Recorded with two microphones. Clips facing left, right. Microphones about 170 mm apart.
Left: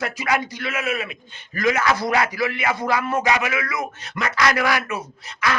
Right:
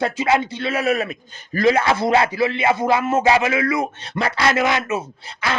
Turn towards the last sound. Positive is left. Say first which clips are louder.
# even
turn(degrees=-25)  # may be behind; listen again after turning